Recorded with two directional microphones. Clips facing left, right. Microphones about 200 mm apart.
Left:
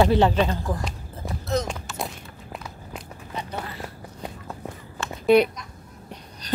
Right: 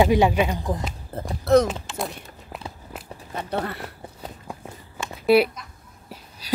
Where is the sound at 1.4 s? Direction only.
60° right (ahead or behind).